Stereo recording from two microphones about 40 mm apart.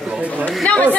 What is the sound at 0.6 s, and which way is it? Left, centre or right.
Speech, left.